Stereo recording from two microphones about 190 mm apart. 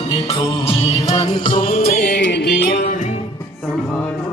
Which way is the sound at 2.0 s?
60° left (ahead or behind).